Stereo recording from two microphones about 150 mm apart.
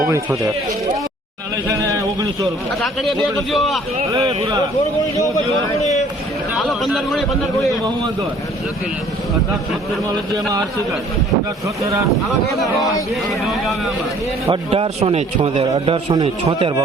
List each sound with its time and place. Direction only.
1.6 s speech: 20° right (ahead or behind)
2.8 s a man's voice: centre (ahead or behind)
4.1 s speech: 30° right (ahead or behind)
6.6 s a man's voice: centre (ahead or behind)
13.5 s a man's voice: centre (ahead or behind)
14.5 s a man's voice: 40° right (ahead or behind)